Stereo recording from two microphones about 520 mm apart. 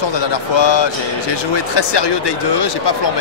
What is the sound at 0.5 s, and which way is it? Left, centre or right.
Speech, left.